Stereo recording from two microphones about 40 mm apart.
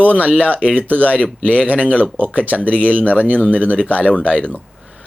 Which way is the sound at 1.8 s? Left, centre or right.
Left.